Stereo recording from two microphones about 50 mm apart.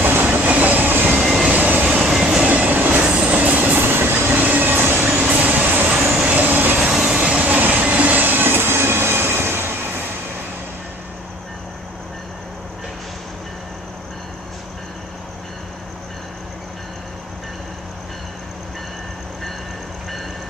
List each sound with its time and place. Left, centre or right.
0.0 s train: right
1.2 s vehicle: centre
1.5 s vehicle: right
1.9 s train: centre
2.4 s train: right
3.1 s train: right
4.3 s train: right
5.0 s vehicle: right
6.1 s train: right
6.8 s train: right